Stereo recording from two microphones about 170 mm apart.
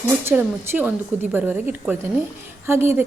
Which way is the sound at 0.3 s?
15° right (ahead or behind).